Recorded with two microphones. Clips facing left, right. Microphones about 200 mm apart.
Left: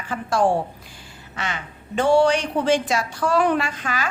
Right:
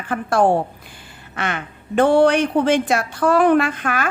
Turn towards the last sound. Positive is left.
turn(degrees=-55)  # may be behind; listen again after turning